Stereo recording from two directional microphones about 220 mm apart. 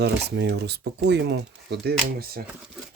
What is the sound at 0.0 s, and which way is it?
Speech, 50° right (ahead or behind).